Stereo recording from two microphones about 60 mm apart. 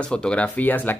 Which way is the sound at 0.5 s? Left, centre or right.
Left.